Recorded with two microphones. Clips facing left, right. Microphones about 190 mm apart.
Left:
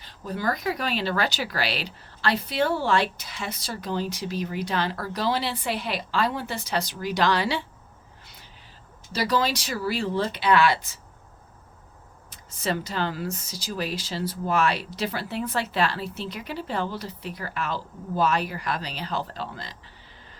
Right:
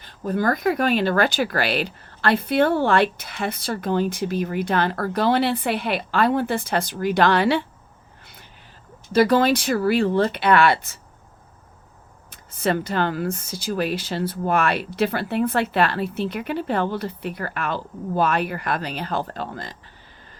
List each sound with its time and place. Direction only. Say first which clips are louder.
0.0 s speech: right 6 dB; 50° right (ahead or behind)
9.1 s speech: right 8 dB; 55° right (ahead or behind)
12.3 s speech: right 6 dB; 55° right (ahead or behind)